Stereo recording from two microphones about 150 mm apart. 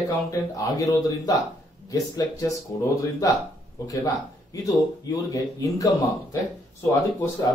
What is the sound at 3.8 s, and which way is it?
Speech, 25° left (ahead or behind).